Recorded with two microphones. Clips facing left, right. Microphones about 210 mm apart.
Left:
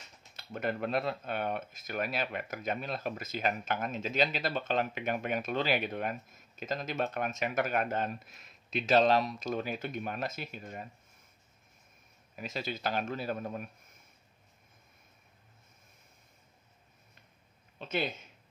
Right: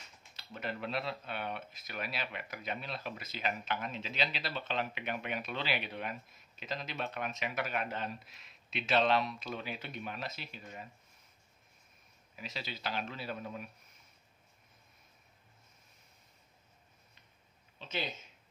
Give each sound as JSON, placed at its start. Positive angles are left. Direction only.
{"t": 0.4, "sound": "speech", "side_deg": 50}
{"t": 12.4, "sound": "speech", "side_deg": 50}
{"t": 17.7, "sound": "a sound", "side_deg": 55}